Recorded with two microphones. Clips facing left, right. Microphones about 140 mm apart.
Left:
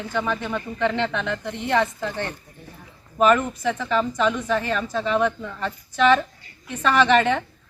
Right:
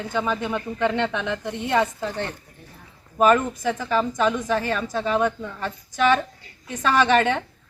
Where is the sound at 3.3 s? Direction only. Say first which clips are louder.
Even; 15° right (ahead or behind).